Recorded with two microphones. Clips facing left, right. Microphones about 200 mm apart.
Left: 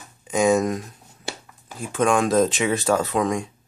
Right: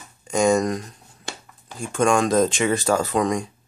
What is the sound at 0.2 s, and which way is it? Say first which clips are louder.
Speech: even; 5° left (ahead or behind).